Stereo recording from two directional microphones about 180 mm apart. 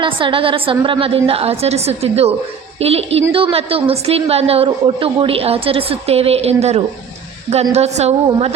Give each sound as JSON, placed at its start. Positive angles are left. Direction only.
{"t": 0.0, "sound": "a woman's voice", "side_deg": -30}